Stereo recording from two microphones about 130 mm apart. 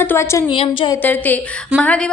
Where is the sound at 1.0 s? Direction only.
15° left (ahead or behind).